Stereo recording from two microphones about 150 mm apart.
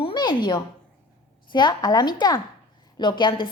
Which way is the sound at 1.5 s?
30° left (ahead or behind).